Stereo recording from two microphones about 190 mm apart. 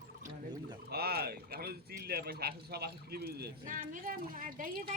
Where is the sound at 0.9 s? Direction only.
55° right (ahead or behind).